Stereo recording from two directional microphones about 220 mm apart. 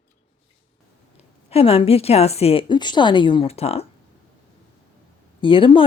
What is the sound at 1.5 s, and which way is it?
Speech, 25° left (ahead or behind).